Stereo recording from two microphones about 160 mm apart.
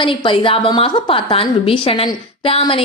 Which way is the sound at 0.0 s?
30° left (ahead or behind).